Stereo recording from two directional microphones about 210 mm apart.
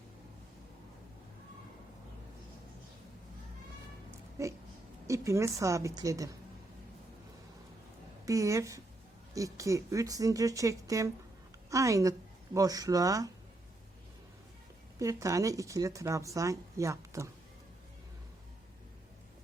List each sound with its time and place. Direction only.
4.1 s a sound: 15° right (ahead or behind)
5.0 s speech: 15° right (ahead or behind)
8.2 s speech: 15° right (ahead or behind)
14.9 s speech: 15° right (ahead or behind)